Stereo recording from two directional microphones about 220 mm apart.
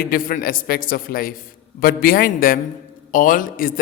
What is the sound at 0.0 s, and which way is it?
A man's voice, 40° left (ahead or behind).